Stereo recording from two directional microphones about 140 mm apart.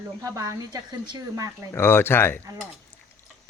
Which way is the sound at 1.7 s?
15° left (ahead or behind).